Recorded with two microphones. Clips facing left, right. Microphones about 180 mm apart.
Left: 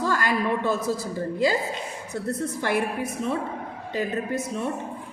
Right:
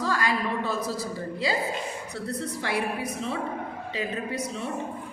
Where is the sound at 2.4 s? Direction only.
50° left (ahead or behind).